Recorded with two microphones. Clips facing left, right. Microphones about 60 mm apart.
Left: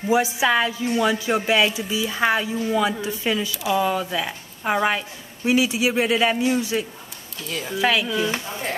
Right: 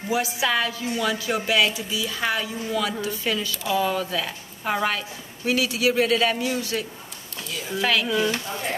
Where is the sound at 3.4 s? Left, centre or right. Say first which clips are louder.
Left 2 dB; centre.